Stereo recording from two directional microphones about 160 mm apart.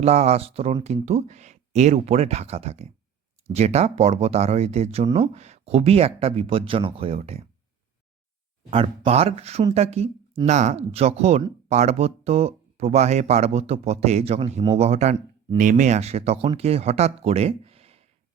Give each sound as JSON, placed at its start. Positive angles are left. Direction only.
{"t": 0.0, "sound": "speech", "side_deg": -40}
{"t": 8.7, "sound": "speech", "side_deg": -40}